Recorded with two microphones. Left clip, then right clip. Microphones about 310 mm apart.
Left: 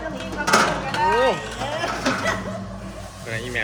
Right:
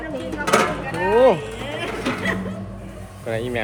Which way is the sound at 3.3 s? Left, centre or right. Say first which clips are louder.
Right 4 dB; centre.